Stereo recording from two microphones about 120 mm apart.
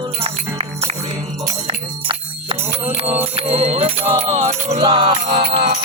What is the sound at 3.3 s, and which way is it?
Music, 65° right (ahead or behind).